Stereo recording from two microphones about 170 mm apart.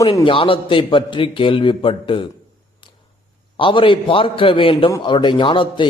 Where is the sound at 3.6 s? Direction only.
30° left (ahead or behind).